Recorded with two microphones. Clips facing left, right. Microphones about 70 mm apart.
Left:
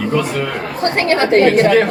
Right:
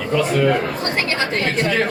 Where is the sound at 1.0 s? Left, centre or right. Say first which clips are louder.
Left 11 dB; left.